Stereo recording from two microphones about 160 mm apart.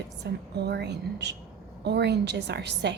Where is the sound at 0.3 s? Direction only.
90° right.